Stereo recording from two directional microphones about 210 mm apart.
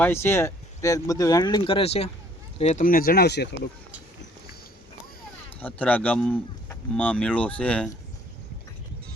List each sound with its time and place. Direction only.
0.0 s speech: 10° left (ahead or behind); by 3.7 s 50° left (ahead or behind)
5.5 s speech: 5° left (ahead or behind)